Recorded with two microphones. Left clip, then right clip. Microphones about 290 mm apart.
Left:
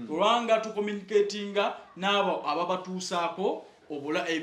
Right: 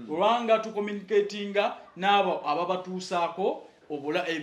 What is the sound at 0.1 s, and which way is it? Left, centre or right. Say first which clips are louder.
A man's voice: right 1 dB; right.